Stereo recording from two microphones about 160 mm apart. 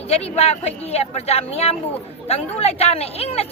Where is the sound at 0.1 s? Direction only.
40° left (ahead or behind).